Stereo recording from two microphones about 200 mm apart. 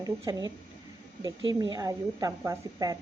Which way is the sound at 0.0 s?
15° right (ahead or behind).